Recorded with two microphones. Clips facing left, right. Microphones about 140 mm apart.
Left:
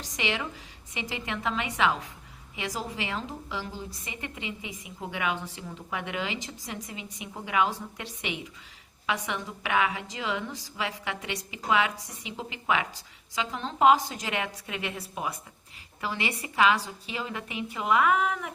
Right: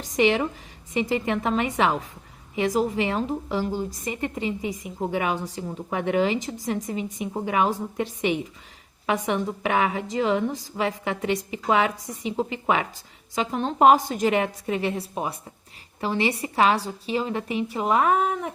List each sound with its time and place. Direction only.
0.0 s a woman's voice: 50° right (ahead or behind)